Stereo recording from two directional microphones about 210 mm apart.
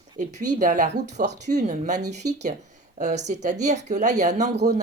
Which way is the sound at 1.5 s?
35° right (ahead or behind).